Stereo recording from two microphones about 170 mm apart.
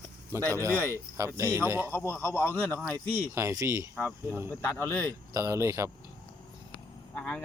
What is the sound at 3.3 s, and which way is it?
Speech, 15° right (ahead or behind).